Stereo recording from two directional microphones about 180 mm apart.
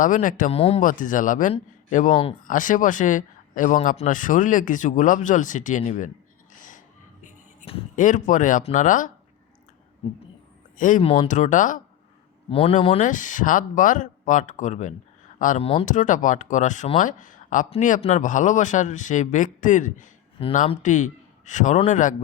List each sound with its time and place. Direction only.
0.0 s speech: 45° left (ahead or behind)
0.5 s speech: 35° left (ahead or behind)
0.8 s speech: 45° left (ahead or behind)
6.7 s a sound: 45° left (ahead or behind)
7.9 s speech: 45° left (ahead or behind)
10.8 s speech: 45° left (ahead or behind)
11.0 s speech: 30° left (ahead or behind)
11.3 s speech: 45° left (ahead or behind)
12.5 s speech: 30° left (ahead or behind)